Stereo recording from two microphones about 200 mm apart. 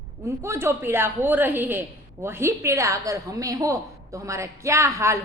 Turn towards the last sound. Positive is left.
turn(degrees=-15)  # may be behind; listen again after turning